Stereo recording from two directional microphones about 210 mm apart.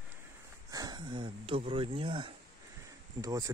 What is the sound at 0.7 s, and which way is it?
Speech, 20° right (ahead or behind).